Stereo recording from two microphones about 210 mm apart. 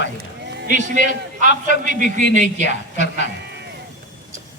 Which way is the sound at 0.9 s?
40° right (ahead or behind).